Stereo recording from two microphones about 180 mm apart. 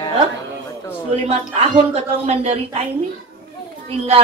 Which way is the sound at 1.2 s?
35° right (ahead or behind).